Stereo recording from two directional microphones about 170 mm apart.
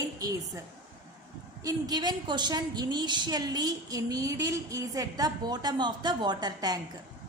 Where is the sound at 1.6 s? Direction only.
25° right (ahead or behind).